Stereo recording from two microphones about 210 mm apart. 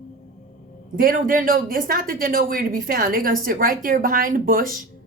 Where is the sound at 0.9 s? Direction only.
40° right (ahead or behind).